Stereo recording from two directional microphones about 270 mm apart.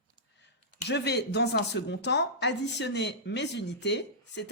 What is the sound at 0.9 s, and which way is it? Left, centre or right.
Speech, left.